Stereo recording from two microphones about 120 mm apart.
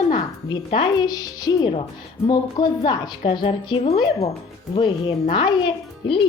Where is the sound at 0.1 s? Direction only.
40° left (ahead or behind).